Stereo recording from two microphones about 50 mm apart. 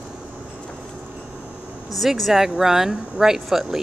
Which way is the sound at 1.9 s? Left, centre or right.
Centre.